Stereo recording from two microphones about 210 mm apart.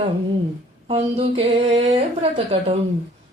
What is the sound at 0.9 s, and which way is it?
Singing, 30° right (ahead or behind).